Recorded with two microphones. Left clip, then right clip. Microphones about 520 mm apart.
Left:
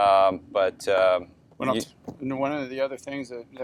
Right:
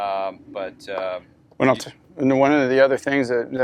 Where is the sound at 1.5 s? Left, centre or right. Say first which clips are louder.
Right 7 dB; right.